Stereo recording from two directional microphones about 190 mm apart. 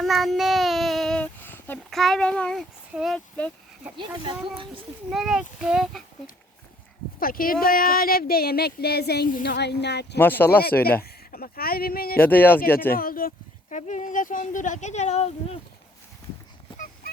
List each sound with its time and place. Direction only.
0.0 s child singing: centre (ahead or behind)
3.9 s speech: 25° right (ahead or behind)
5.1 s speech: 5° right (ahead or behind)
7.2 s speech: 50° left (ahead or behind)
10.2 s speech: 10° left (ahead or behind)
11.0 s speech: 50° left (ahead or behind)
12.2 s speech: 10° left (ahead or behind)
12.9 s speech: 50° left (ahead or behind); by 15.5 s 35° left (ahead or behind)
16.7 s dog: 45° left (ahead or behind)